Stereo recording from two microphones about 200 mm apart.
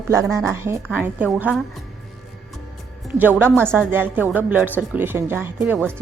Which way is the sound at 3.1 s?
10° right (ahead or behind).